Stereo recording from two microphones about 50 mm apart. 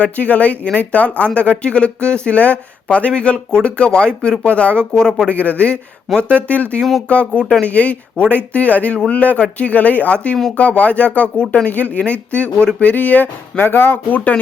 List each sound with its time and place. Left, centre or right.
0.0 s speech: left
4.9 s speech: centre
5.3 s speech: left
6.1 s speech: centre
6.5 s speech: left
11.7 s speech: left